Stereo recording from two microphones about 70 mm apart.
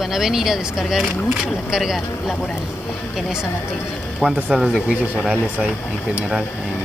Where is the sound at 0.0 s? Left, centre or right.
Centre.